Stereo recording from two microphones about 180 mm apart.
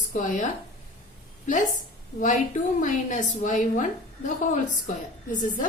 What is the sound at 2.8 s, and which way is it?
A woman's voice, 45° left (ahead or behind).